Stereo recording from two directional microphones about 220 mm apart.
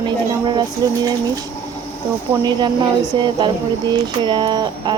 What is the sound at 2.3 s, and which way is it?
Speech, 10° right (ahead or behind).